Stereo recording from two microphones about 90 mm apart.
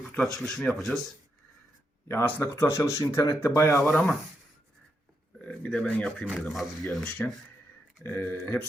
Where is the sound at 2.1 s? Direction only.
25° left (ahead or behind).